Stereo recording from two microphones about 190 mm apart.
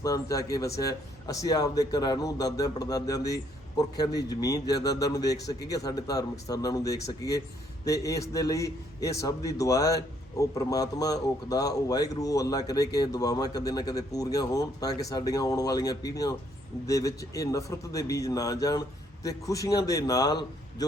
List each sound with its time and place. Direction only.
0.0 s a man's voice: 20° left (ahead or behind)